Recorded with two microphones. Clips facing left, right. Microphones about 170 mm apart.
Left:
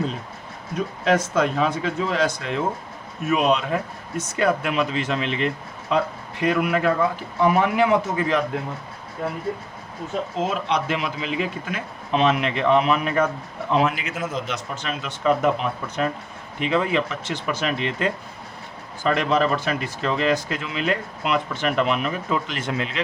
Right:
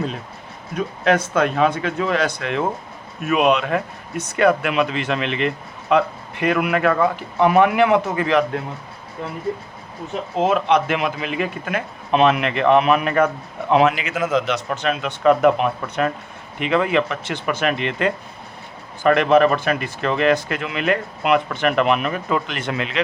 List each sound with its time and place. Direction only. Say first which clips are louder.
1.0 s a man's voice: right 2 dB; 60° right (ahead or behind)
10.3 s a man's voice: right 8 dB; 60° right (ahead or behind)